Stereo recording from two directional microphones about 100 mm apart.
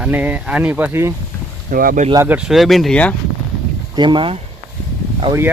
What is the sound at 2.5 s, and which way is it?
Speech, centre (ahead or behind).